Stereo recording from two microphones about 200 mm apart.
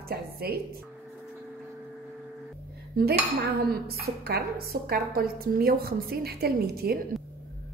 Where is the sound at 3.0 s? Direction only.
50° right (ahead or behind).